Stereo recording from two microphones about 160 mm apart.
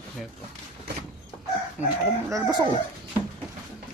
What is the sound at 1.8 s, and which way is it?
Speech, 10° right (ahead or behind).